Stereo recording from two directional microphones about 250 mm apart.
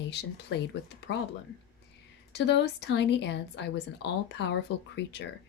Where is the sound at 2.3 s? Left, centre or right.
Left.